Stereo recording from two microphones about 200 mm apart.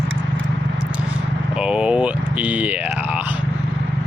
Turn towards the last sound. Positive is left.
turn(degrees=-5)  # may be behind; listen again after turning